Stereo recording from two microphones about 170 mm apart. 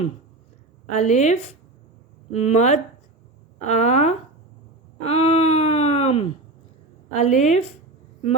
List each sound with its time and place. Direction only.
0.9 s speech: 40° left (ahead or behind)